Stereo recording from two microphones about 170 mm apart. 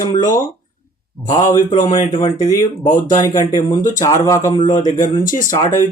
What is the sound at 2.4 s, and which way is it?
Speech, 20° left (ahead or behind).